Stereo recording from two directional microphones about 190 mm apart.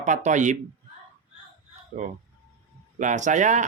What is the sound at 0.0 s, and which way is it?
Speech, 40° right (ahead or behind).